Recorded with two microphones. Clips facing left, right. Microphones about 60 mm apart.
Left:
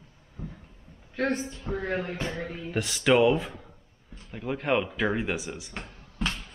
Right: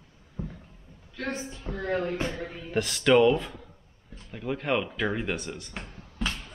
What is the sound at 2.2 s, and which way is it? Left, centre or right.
Speech, centre.